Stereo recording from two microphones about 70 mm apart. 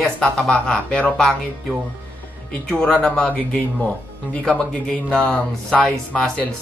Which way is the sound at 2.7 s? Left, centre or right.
Centre.